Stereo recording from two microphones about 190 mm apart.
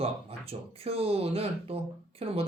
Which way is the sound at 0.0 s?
30° right (ahead or behind).